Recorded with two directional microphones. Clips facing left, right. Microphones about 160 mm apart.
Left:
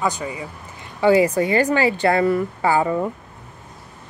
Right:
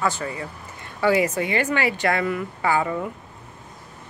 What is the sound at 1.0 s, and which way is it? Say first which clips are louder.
A woman's voice: left 5 dB; 30° left (ahead or behind).